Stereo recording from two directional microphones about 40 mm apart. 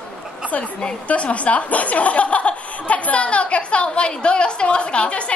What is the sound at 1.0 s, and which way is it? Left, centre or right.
Speech, left.